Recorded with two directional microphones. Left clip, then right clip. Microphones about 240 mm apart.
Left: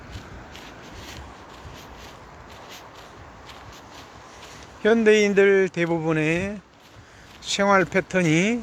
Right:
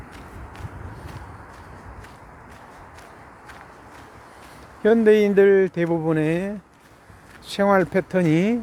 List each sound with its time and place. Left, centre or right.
4.8 s speech: centre